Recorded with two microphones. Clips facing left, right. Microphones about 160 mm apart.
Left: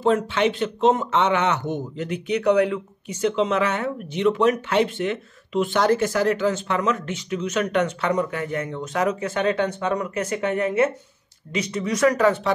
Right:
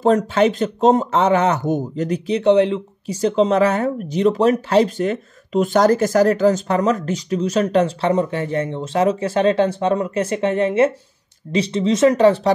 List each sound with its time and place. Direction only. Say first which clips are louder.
0.0 s speech: right 5 dB; 40° right (ahead or behind)